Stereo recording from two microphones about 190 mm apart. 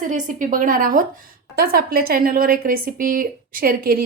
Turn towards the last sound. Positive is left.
turn(degrees=-50)  # may be behind; listen again after turning